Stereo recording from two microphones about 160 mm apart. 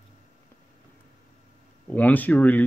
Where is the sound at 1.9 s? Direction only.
10° left (ahead or behind).